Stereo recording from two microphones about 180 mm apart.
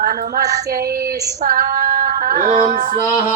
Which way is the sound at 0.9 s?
15° right (ahead or behind).